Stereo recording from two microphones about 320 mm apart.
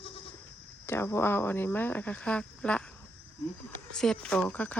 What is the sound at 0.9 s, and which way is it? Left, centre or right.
Speech, centre.